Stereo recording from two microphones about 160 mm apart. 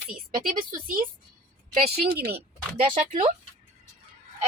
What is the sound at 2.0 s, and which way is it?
Speech, 80° right.